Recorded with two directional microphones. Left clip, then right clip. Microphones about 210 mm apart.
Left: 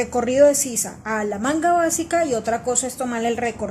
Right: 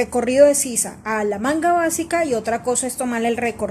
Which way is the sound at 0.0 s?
20° right (ahead or behind).